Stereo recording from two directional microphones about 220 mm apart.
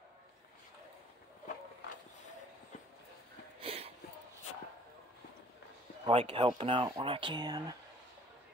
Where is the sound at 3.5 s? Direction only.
25° right (ahead or behind).